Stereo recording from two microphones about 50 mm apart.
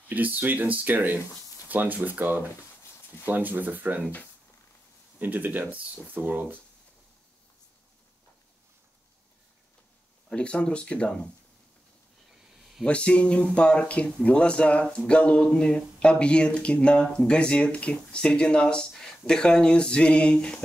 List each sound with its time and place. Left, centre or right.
0.1 s speech: right
5.2 s speech: right
10.3 s speech: left
12.3 s a sound: centre
12.8 s speech: left
18.9 s a sound: centre